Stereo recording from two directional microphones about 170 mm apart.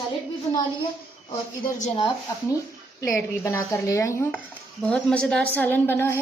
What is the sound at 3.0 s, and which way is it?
A woman's voice, 15° left (ahead or behind).